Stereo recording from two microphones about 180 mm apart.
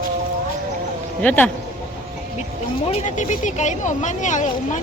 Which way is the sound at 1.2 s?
10° left (ahead or behind).